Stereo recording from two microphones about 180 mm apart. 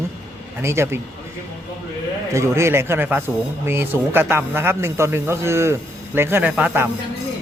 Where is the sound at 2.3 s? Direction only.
15° right (ahead or behind).